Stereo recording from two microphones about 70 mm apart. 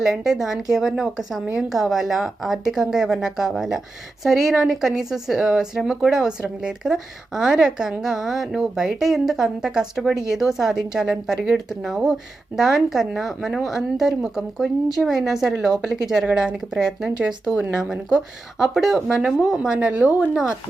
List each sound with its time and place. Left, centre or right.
0.0 s a woman's voice: centre
19.5 s a woman's voice: centre